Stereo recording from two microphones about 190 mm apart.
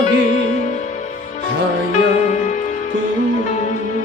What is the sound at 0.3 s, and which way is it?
Music, 40° left (ahead or behind).